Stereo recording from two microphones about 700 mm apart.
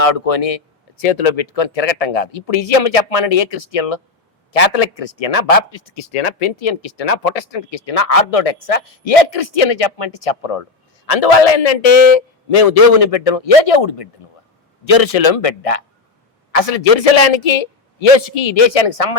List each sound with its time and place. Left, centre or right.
0.0 s speech: left